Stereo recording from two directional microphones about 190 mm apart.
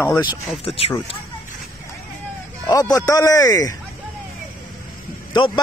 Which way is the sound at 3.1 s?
20° left (ahead or behind).